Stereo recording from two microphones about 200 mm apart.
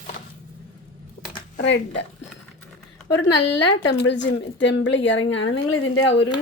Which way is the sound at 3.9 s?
60° left (ahead or behind).